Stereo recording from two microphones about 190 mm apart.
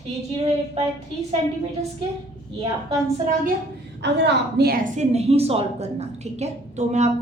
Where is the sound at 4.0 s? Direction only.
65° right (ahead or behind).